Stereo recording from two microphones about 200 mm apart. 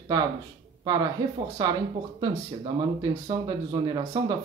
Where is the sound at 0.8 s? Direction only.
20° right (ahead or behind).